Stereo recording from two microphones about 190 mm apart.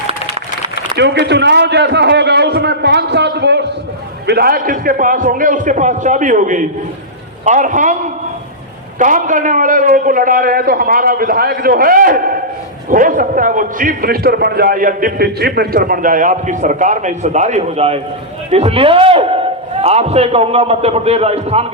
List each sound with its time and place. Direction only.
0.9 s a man's voice: 65° right (ahead or behind); by 7.9 s 40° right (ahead or behind)
9.0 s a man's voice: 45° right (ahead or behind)